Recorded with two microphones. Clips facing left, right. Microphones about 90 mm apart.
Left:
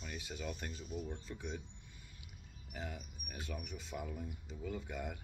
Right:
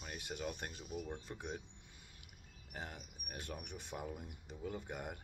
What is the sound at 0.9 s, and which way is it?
Speech, 60° right (ahead or behind).